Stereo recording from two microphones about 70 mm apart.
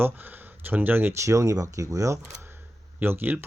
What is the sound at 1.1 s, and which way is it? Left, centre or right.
Speech, right.